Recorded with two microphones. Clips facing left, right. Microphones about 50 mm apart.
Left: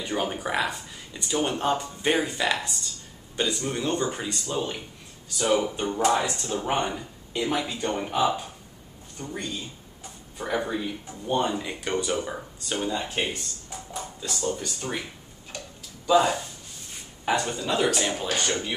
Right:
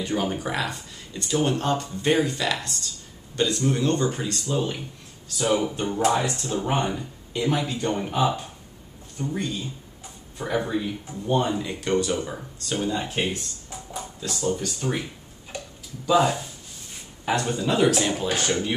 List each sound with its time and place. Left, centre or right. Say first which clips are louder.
0.0 s speech: right 2 dB; centre
15.5 s tick-tock: right 3 dB; centre
16.1 s speech: even; centre